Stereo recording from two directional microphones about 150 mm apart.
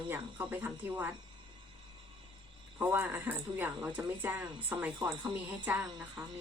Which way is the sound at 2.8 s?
15° right (ahead or behind).